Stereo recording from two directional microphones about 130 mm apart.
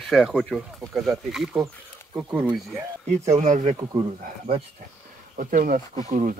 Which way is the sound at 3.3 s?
65° right (ahead or behind).